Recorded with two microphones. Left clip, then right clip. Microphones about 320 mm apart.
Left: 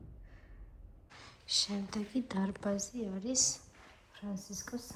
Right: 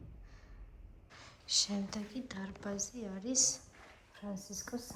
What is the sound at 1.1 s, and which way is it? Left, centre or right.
A woman's voice, centre.